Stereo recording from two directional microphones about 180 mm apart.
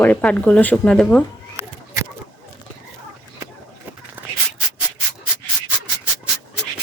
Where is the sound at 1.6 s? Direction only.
15° right (ahead or behind).